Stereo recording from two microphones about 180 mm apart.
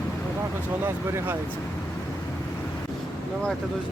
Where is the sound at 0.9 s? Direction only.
15° right (ahead or behind).